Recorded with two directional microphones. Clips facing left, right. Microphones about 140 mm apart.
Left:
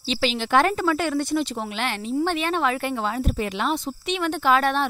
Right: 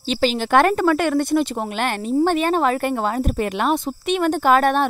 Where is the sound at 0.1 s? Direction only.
45° right (ahead or behind).